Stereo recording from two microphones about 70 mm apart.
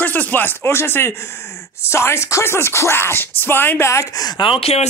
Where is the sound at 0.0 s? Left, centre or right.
Left.